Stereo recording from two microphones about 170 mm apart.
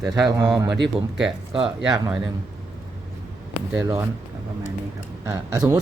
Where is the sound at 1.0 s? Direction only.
5° right (ahead or behind).